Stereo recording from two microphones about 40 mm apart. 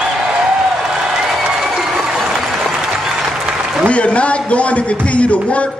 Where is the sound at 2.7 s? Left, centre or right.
Centre.